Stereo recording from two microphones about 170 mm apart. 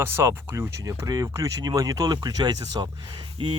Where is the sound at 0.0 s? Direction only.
15° right (ahead or behind).